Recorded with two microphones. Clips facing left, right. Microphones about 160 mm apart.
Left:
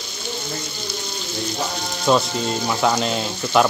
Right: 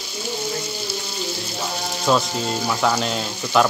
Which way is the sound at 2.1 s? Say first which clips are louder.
Left 2 dB; centre (ahead or behind).